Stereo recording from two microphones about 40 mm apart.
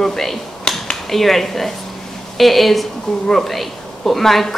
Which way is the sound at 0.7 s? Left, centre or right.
Centre.